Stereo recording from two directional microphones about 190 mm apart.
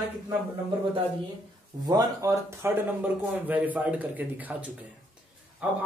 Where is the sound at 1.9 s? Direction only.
20° right (ahead or behind).